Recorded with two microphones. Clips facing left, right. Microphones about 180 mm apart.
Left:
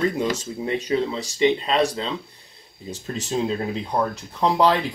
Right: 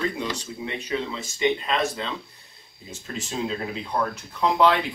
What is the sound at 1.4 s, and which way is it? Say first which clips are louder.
Speech: left 4 dB; 30° left (ahead or behind).